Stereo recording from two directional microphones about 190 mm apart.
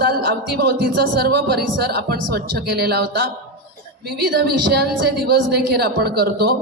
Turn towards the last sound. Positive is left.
turn(degrees=-55)  # may be behind; listen again after turning